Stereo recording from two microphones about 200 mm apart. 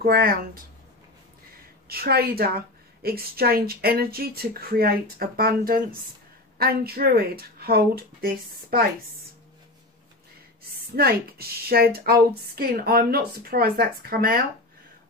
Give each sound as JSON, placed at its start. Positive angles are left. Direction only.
{"t": 0.0, "sound": "a woman's voice", "side_deg": -50}
{"t": 1.9, "sound": "a woman's voice", "side_deg": -50}
{"t": 11.0, "sound": "a woman's voice", "side_deg": -50}